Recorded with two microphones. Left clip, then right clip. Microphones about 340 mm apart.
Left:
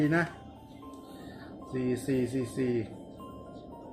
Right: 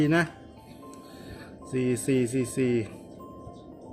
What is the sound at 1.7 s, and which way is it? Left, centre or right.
Speech, right.